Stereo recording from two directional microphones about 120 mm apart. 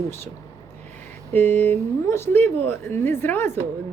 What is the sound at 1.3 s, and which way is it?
A woman's voice, 15° left (ahead or behind).